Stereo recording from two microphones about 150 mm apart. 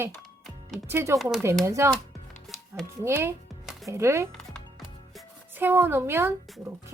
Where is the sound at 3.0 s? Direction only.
15° right (ahead or behind).